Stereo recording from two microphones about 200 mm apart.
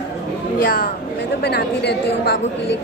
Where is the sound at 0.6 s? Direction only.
55° left (ahead or behind).